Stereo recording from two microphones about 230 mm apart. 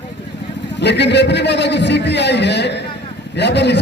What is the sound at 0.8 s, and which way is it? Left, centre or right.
Speech, left.